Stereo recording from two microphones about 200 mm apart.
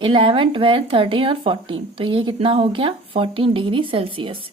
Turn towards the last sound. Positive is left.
turn(degrees=-25)  # may be behind; listen again after turning